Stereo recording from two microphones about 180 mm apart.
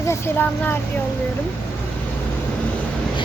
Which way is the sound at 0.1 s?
10° left (ahead or behind).